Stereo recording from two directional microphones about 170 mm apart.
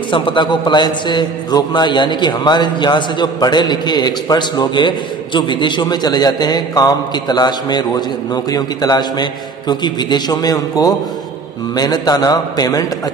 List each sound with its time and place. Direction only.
0.1 s a man's voice: 30° left (ahead or behind)